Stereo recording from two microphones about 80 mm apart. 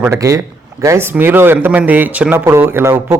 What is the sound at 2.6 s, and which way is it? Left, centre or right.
Speech, right.